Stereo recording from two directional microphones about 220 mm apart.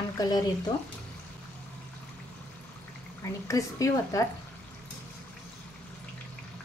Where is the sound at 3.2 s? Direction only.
15° left (ahead or behind).